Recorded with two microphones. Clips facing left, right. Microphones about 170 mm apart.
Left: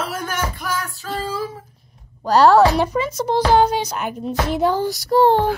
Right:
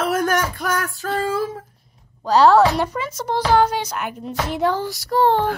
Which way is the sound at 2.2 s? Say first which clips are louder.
Left 1 dB; 10° left (ahead or behind).